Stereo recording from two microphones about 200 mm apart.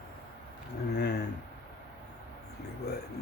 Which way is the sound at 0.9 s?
55° left (ahead or behind).